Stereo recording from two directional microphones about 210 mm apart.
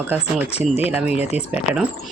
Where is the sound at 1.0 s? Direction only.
5° right (ahead or behind).